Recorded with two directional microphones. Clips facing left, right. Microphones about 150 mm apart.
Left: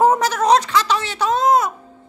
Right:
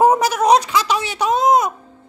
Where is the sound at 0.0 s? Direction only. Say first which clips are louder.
Right 1 dB; 10° right (ahead or behind).